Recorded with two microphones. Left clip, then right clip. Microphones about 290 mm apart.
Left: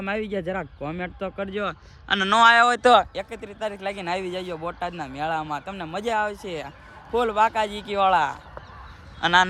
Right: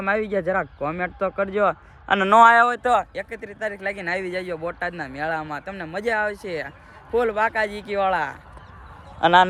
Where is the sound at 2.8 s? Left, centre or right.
Left.